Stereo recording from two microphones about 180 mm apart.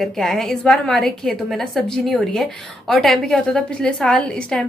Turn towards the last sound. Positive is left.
turn(degrees=5)  # may be behind; listen again after turning